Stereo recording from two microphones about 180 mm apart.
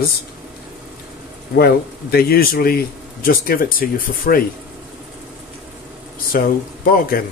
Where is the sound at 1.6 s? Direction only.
60° left (ahead or behind).